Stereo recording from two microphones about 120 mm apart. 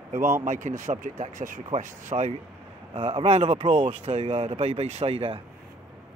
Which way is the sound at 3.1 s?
55° right (ahead or behind).